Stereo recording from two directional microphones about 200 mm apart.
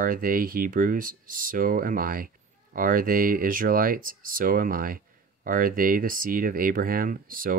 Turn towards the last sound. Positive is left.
turn(degrees=-45)  # may be behind; listen again after turning